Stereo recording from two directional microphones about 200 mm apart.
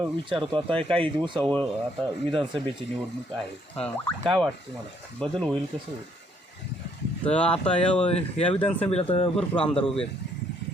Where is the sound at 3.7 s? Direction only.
5° left (ahead or behind).